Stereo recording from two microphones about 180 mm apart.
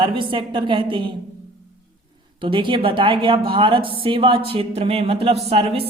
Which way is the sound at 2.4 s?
25° right (ahead or behind).